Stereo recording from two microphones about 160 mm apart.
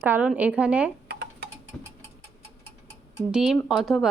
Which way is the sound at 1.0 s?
90° right.